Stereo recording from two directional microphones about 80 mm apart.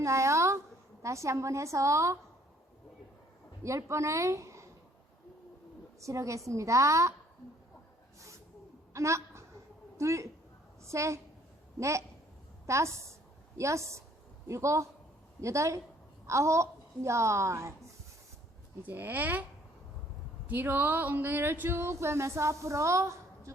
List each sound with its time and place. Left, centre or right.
0.0 s a sound: right
1.0 s speech: right
3.6 s a woman's voice: right
6.0 s speech: right
8.9 s a sound: right
10.0 s a woman's voice: right
18.8 s speech: right
20.5 s speech: right